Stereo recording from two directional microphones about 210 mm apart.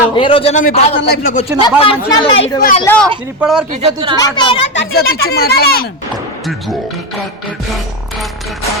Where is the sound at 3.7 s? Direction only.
25° right (ahead or behind).